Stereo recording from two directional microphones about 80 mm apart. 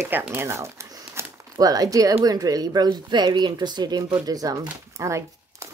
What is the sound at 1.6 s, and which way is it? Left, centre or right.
Speech, right.